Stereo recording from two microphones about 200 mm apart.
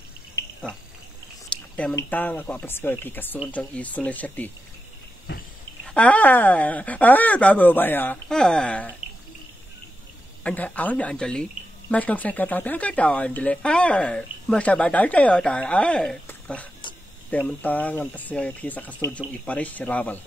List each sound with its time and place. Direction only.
1.5 s a sound: 5° left (ahead or behind)
2.0 s speech: 10° left (ahead or behind)
5.9 s speech: 5° left (ahead or behind)
10.4 s speech: 10° left (ahead or behind)
16.8 s a sound: 25° left (ahead or behind)
17.3 s speech: 5° left (ahead or behind)